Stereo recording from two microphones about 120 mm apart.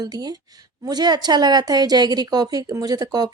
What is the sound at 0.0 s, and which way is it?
Speech, 35° right (ahead or behind).